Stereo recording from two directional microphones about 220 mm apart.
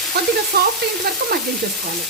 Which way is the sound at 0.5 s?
50° right (ahead or behind).